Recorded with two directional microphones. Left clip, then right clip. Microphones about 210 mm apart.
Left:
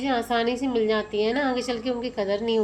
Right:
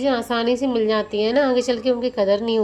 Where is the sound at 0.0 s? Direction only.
25° right (ahead or behind).